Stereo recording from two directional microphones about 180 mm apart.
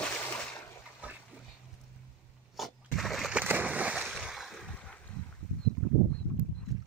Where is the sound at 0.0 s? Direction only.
5° left (ahead or behind).